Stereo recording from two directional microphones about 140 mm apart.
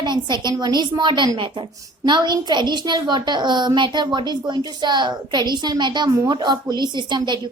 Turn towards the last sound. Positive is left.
turn(degrees=-35)  # may be behind; listen again after turning